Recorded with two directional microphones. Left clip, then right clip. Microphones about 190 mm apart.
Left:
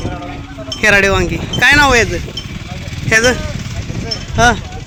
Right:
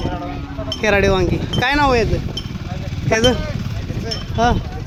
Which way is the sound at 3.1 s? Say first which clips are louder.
Left 4 dB; 5° right (ahead or behind).